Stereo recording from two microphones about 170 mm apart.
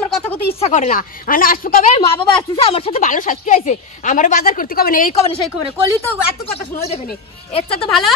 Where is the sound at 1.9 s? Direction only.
35° left (ahead or behind).